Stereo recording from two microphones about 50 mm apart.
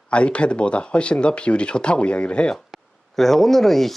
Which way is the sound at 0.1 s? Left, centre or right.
Left.